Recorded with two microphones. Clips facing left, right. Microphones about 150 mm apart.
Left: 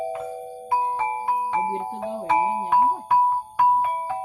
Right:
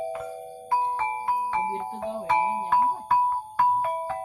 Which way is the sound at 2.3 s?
30° left (ahead or behind).